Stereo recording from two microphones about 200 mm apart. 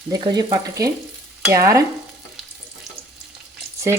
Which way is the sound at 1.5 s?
15° right (ahead or behind).